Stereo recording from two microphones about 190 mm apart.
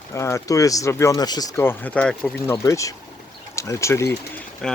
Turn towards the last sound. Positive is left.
turn(degrees=5)  # may be behind; listen again after turning